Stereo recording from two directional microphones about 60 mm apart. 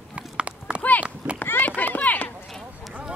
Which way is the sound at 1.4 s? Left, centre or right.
Left.